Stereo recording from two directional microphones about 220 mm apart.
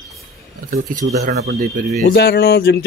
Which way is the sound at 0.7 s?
35° right (ahead or behind).